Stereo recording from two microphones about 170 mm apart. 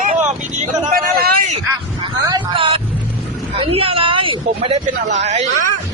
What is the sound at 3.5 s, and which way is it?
Speech, 30° right (ahead or behind).